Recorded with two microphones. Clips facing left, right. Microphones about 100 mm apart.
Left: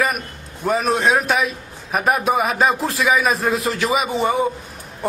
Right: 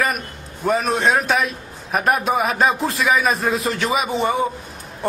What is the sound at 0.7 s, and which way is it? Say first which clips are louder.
A man's voice: even; centre (ahead or behind).